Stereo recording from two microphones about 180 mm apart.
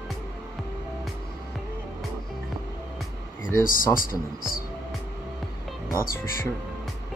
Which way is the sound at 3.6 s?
50° left (ahead or behind).